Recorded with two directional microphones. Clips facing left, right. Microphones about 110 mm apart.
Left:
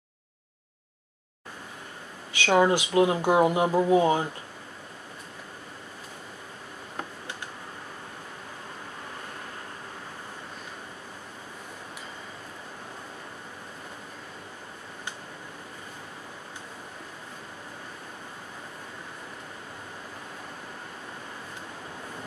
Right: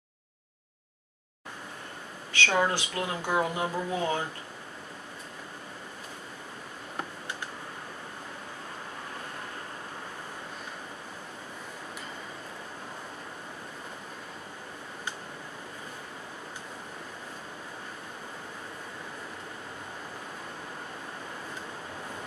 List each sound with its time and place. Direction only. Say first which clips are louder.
2.3 s speech: left 5 dB; 15° left (ahead or behind)